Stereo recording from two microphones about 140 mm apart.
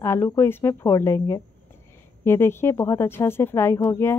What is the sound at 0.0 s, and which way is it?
A woman's voice, 20° left (ahead or behind).